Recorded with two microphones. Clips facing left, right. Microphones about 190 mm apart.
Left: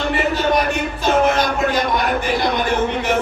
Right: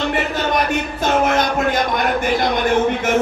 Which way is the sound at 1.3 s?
50° right (ahead or behind).